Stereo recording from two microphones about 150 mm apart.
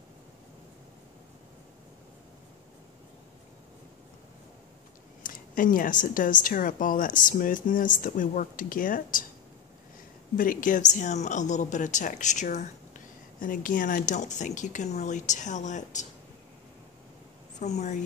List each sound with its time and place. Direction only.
5.2 s speech: 65° left (ahead or behind)
10.3 s speech: 65° left (ahead or behind)
17.6 s speech: 50° left (ahead or behind)